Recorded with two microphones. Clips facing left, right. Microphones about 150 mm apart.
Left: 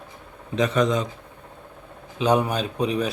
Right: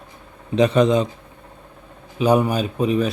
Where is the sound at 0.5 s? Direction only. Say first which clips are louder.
Right 5 dB; 30° right (ahead or behind).